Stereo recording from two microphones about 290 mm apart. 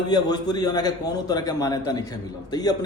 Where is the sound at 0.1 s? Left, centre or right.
Centre.